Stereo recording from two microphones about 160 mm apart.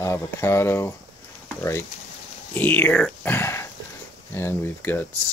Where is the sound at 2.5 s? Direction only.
10° left (ahead or behind).